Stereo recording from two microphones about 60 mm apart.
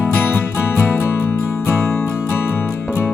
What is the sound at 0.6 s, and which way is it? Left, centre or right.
Music, left.